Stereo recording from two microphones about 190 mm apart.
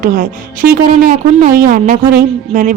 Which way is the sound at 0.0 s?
45° right (ahead or behind).